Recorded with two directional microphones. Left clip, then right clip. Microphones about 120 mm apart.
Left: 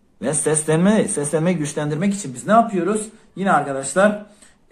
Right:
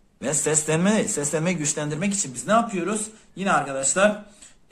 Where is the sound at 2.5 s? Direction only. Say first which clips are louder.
Left 6 dB; 20° right (ahead or behind).